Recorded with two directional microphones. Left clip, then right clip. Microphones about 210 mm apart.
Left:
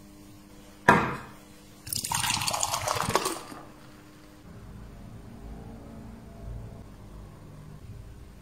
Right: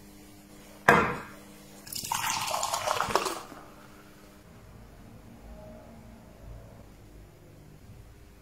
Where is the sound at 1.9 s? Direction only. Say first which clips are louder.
Left 2 dB; 20° left (ahead or behind).